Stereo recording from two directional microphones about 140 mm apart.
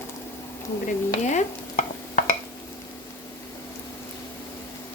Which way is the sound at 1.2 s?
60° left (ahead or behind).